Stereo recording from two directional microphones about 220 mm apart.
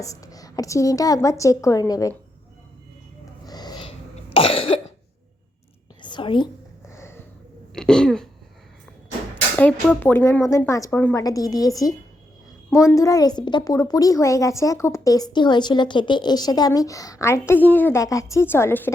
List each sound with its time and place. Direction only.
0.0 s a woman's voice: 15° left (ahead or behind)
3.4 s a sound: 20° left (ahead or behind)
4.4 s cough: 25° left (ahead or behind)
6.0 s whispering: 20° left (ahead or behind)
7.7 s speech: 5° left (ahead or behind)
9.3 s a sound: 5° left (ahead or behind)
9.9 s a woman's voice: 10° left (ahead or behind)